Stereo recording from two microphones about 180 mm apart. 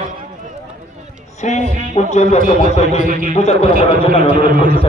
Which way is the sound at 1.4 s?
40° left (ahead or behind).